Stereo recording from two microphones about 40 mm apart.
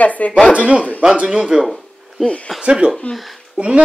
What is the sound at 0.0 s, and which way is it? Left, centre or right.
Speech, left.